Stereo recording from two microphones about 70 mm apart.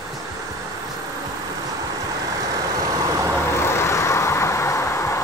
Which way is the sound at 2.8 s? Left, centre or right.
Right.